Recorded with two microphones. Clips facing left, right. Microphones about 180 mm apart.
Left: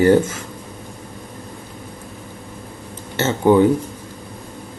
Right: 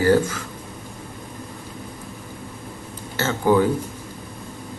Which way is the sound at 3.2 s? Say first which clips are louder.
Left 5 dB; 25° left (ahead or behind).